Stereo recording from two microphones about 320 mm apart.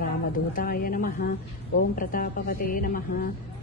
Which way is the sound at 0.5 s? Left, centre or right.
Left.